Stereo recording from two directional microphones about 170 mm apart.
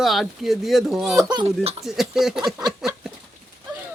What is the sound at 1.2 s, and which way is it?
Speech, 25° right (ahead or behind).